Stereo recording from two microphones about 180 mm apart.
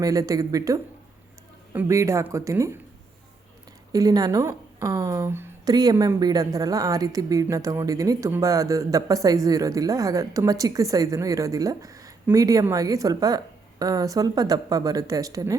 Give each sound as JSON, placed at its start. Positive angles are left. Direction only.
{"t": 0.0, "sound": "a woman's voice", "side_deg": -20}
{"t": 3.9, "sound": "a woman's voice", "side_deg": -20}